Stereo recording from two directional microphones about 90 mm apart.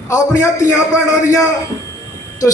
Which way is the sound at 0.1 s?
35° left (ahead or behind).